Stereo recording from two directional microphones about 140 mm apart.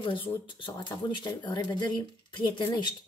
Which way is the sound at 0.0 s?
35° left (ahead or behind).